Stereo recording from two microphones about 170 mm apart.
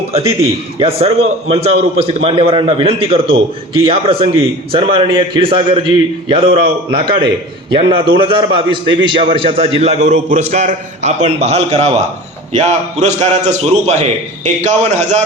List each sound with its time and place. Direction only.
0.8 s a man's voice: 35° right (ahead or behind)